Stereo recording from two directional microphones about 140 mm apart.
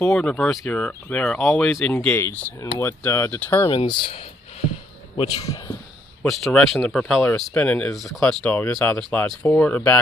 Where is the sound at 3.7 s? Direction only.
35° left (ahead or behind).